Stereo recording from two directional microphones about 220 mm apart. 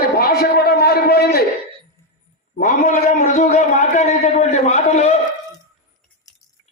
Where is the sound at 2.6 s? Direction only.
35° left (ahead or behind).